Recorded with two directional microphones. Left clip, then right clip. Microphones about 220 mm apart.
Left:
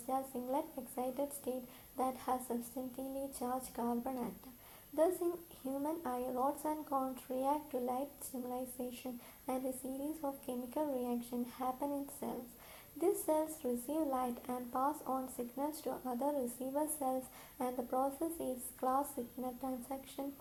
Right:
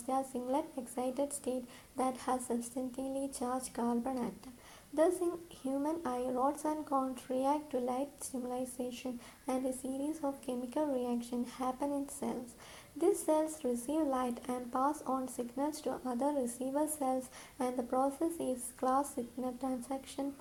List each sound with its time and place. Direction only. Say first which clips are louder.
0.1 s a woman's voice: right 3 dB; 35° right (ahead or behind)